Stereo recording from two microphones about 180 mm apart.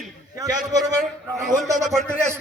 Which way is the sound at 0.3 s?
20° right (ahead or behind).